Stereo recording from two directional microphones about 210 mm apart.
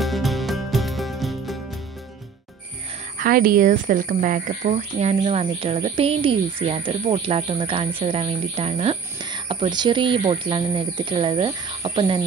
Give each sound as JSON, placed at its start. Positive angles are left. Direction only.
{"t": 0.0, "sound": "music", "side_deg": 0}
{"t": 3.2, "sound": "speech", "side_deg": -45}